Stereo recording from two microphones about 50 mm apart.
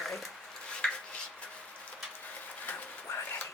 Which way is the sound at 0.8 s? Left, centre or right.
Centre.